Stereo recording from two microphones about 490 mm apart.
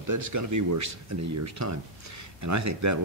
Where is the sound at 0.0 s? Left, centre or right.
Right.